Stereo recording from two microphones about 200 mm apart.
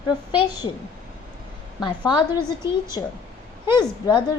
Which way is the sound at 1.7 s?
20° left (ahead or behind).